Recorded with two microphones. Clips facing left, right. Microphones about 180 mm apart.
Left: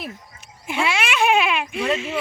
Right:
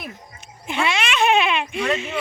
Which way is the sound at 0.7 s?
5° left (ahead or behind).